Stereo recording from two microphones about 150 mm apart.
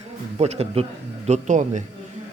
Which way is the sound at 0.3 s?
45° right (ahead or behind).